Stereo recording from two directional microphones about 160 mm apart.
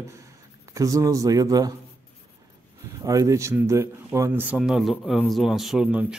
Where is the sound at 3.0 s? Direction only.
20° right (ahead or behind).